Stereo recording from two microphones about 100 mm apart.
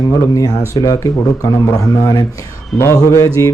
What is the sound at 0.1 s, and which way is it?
Speech, 40° left (ahead or behind).